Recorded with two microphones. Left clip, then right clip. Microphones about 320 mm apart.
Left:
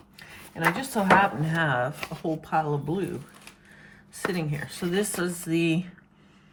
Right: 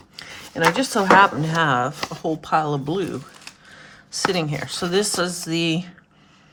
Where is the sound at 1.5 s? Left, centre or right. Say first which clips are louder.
Right 6 dB; centre.